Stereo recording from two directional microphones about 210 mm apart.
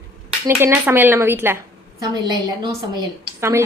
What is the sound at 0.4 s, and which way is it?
A woman's voice, 10° right (ahead or behind).